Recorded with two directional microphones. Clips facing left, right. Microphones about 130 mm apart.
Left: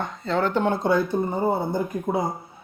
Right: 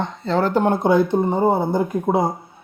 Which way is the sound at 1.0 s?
75° right (ahead or behind).